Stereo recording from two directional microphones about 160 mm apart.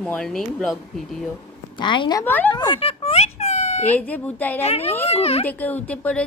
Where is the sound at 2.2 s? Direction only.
10° left (ahead or behind).